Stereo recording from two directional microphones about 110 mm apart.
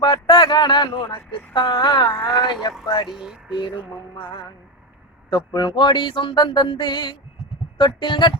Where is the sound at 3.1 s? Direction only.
5° right (ahead or behind).